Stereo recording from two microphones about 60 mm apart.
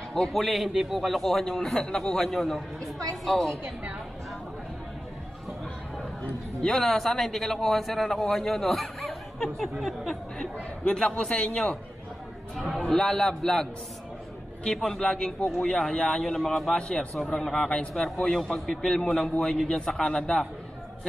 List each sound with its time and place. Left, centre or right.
0.3 s a man's voice: centre
6.6 s a man's voice: centre
10.8 s a man's voice: centre
12.5 s music: centre
12.8 s a man's voice: centre
14.9 s a man's voice: centre